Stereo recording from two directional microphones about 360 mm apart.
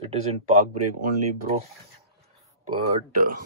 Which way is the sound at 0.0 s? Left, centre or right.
Centre.